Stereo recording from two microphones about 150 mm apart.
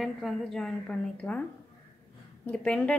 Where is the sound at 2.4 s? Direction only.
5° left (ahead or behind).